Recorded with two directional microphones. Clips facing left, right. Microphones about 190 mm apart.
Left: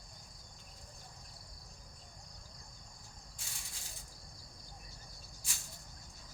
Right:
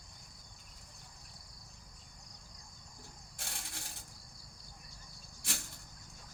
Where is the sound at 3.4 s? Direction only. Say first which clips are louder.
Right 8 dB; 65° right (ahead or behind).